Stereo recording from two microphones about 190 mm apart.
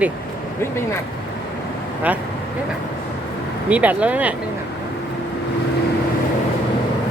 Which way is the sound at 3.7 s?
10° right (ahead or behind).